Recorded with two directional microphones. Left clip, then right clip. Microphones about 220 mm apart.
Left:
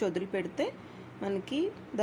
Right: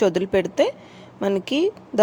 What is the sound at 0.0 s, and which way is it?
Speech, 35° right (ahead or behind).